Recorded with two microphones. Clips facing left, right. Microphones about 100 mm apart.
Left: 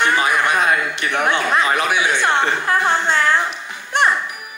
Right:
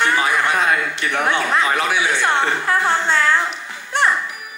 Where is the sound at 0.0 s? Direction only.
20° left (ahead or behind).